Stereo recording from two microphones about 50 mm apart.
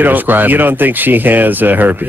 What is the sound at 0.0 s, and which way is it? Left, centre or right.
Speech, right.